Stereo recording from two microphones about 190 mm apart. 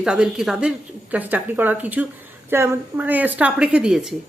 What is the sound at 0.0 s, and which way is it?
A woman's voice, 5° right (ahead or behind).